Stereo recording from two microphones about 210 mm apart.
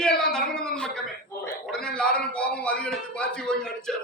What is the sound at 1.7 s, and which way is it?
A man's voice, 5° left (ahead or behind).